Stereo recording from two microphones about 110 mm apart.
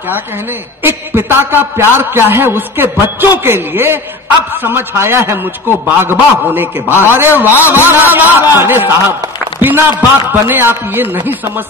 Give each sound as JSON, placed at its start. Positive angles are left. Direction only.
{"t": 0.1, "sound": "a man's voice", "side_deg": -20}